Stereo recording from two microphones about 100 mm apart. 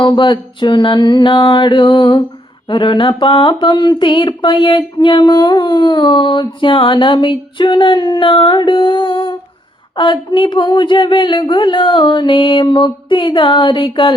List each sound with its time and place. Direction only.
0.0 s mantra: 55° left (ahead or behind)